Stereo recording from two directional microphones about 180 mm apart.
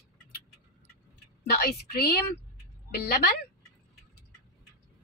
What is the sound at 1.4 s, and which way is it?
Speech, 60° left (ahead or behind).